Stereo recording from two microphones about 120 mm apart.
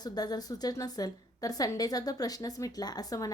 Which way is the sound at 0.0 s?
35° left (ahead or behind).